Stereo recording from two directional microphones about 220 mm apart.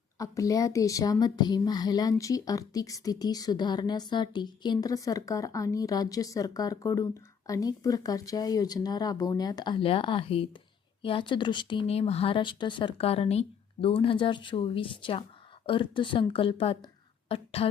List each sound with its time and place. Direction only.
0.2 s a woman's voice: 15° left (ahead or behind)